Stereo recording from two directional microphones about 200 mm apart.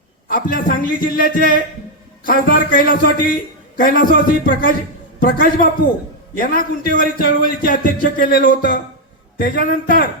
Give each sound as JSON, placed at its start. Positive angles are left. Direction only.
{"t": 0.3, "sound": "a man's voice", "side_deg": 45}